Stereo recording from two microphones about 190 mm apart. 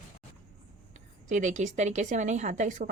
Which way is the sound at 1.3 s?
40° right (ahead or behind).